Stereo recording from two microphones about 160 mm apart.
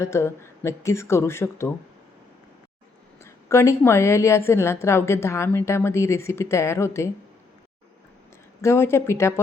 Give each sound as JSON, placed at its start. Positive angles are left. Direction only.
{"t": 0.0, "sound": "a woman's voice", "side_deg": 15}
{"t": 3.2, "sound": "a woman's voice", "side_deg": 20}
{"t": 8.6, "sound": "a woman's voice", "side_deg": 15}